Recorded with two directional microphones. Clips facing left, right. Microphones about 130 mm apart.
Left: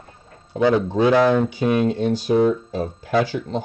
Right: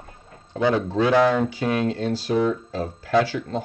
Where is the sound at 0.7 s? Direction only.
20° left (ahead or behind).